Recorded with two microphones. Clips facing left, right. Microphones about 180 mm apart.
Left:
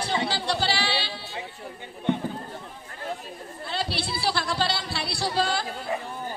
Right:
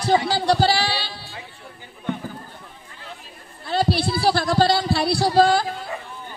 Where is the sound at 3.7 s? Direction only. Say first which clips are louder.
Right 9 dB; 45° right (ahead or behind).